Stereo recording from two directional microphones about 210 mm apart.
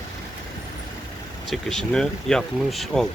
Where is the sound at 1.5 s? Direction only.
Centre (ahead or behind).